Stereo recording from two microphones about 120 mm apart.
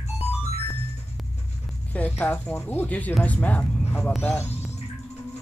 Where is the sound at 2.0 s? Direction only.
10° left (ahead or behind).